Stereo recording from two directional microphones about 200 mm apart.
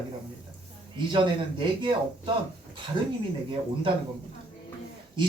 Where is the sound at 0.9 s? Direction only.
25° right (ahead or behind).